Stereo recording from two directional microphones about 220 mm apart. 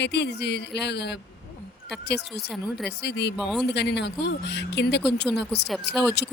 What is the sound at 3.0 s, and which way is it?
Speech, 50° left (ahead or behind).